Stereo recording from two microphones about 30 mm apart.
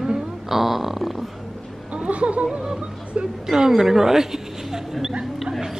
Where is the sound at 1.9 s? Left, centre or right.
Right.